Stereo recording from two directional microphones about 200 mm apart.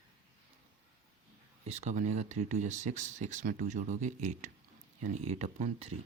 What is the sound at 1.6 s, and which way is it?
Speech, 30° right (ahead or behind).